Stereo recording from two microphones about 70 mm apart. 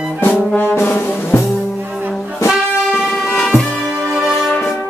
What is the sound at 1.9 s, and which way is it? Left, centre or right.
Brass instrument, right.